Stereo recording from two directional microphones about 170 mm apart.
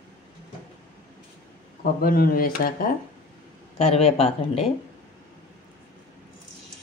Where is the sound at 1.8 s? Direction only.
60° left (ahead or behind).